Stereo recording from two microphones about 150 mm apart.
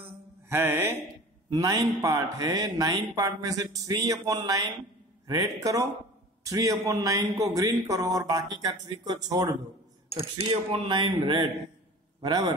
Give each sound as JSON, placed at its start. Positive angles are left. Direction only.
{"t": 0.5, "sound": "music", "side_deg": -15}
{"t": 1.5, "sound": "speech", "side_deg": -25}
{"t": 10.5, "sound": "speech", "side_deg": -40}